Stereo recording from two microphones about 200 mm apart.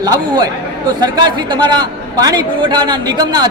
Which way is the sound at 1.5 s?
20° right (ahead or behind).